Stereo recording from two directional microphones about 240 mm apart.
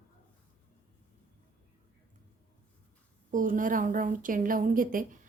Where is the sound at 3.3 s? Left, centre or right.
Right.